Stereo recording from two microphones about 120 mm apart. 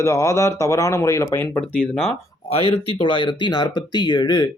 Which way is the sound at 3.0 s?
45° left (ahead or behind).